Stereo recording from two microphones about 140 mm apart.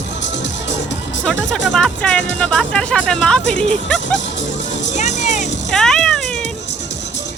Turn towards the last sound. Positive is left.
turn(degrees=5)  # may be behind; listen again after turning